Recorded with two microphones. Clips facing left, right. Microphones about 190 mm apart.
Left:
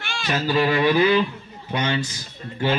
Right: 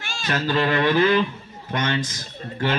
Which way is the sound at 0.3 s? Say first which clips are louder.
Left 1 dB; 10° left (ahead or behind).